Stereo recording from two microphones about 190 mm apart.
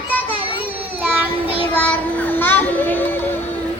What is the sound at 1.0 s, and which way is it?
Child singing, 10° right (ahead or behind).